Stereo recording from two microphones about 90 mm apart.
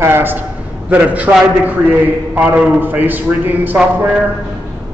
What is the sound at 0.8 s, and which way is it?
A man's voice, 15° right (ahead or behind).